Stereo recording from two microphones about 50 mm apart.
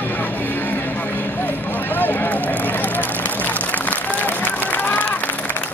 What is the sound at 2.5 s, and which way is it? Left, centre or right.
Run, left.